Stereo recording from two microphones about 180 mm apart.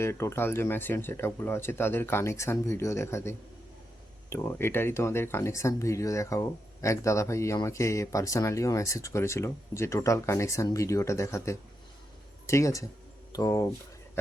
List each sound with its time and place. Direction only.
0.0 s speech: 15° left (ahead or behind)